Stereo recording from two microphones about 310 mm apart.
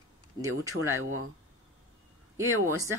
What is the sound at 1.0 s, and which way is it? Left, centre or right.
Speech, right.